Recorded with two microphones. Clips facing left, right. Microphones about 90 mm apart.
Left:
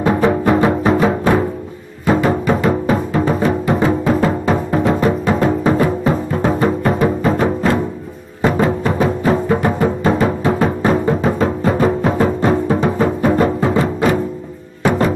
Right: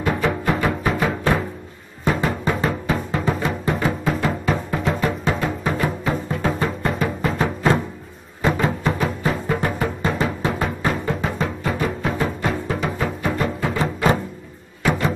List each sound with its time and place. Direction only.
0.0 s music: 25° left (ahead or behind)
2.0 s music: 35° left (ahead or behind)